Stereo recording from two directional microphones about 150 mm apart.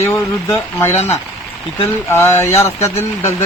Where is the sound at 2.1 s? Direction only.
15° left (ahead or behind).